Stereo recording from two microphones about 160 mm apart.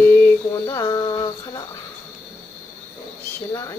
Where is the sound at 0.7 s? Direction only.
25° left (ahead or behind).